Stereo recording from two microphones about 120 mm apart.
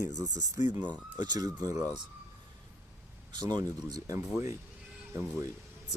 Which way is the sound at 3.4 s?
35° right (ahead or behind).